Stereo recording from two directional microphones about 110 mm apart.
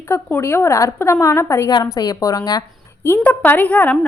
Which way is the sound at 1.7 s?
35° left (ahead or behind).